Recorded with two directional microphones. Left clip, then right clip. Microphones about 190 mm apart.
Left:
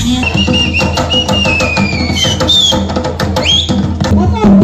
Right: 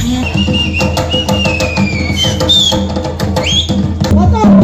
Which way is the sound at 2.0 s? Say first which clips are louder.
Right 1 dB; 20° left (ahead or behind).